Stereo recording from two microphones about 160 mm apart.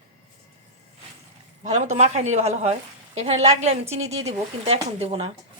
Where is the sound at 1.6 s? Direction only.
45° right (ahead or behind).